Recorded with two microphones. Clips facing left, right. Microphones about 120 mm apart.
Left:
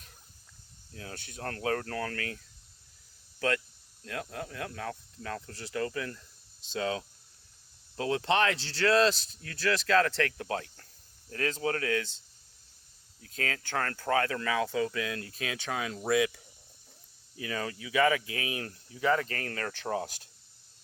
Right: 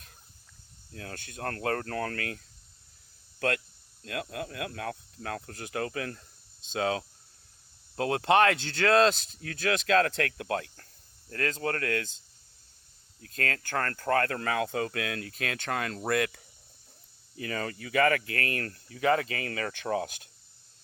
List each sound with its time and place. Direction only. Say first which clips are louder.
0.9 s speech: right 2 dB; 55° right (ahead or behind)
4.0 s speech: right 2 dB; 65° right (ahead or behind)
13.2 s speech: right 2 dB; 55° right (ahead or behind)